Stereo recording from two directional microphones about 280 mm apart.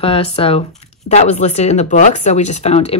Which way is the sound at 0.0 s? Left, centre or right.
Centre.